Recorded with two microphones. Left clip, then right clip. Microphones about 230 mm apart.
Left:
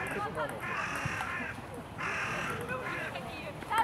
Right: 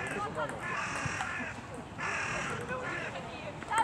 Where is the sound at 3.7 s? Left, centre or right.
Left.